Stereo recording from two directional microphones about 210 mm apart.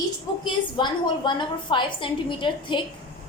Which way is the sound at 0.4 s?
20° left (ahead or behind).